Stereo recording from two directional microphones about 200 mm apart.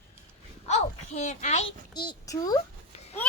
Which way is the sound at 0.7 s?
35° left (ahead or behind).